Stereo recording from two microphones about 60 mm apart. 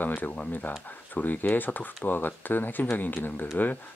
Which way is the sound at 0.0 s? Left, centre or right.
Left.